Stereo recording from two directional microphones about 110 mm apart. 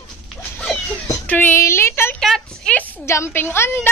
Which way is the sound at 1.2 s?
15° left (ahead or behind).